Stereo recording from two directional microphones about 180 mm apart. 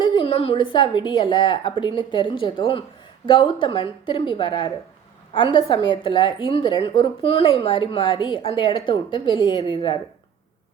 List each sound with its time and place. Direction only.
0.0 s a woman's voice: 30° left (ahead or behind)